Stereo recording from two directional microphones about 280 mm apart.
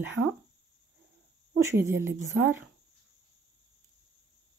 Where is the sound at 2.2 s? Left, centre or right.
Right.